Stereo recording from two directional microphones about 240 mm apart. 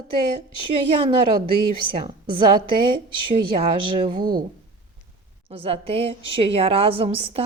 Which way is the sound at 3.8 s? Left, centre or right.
Centre.